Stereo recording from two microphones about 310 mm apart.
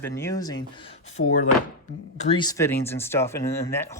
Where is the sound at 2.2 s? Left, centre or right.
Centre.